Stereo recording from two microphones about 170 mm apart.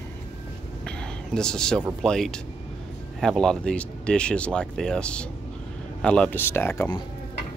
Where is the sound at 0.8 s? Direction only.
5° left (ahead or behind).